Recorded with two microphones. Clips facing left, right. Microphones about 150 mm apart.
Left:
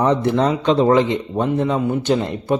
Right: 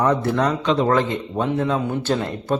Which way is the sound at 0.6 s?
30° left (ahead or behind).